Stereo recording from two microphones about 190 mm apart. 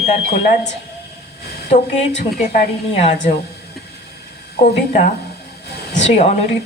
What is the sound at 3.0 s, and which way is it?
Speech, 35° left (ahead or behind).